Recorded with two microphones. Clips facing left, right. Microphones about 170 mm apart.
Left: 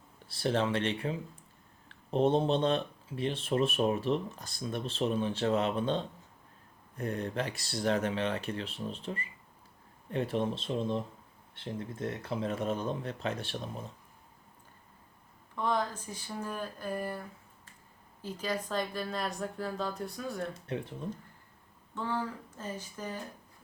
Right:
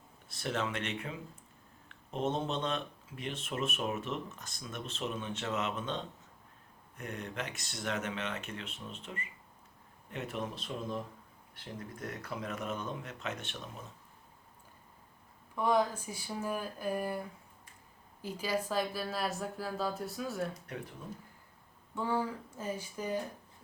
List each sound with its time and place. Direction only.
0.3 s speech: 30° left (ahead or behind)
15.5 s speech: 10° right (ahead or behind)
20.7 s speech: 30° left (ahead or behind)
21.9 s speech: 10° right (ahead or behind)